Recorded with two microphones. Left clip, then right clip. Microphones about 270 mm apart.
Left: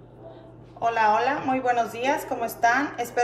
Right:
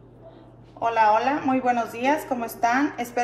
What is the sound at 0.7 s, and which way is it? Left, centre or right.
A woman's voice, centre.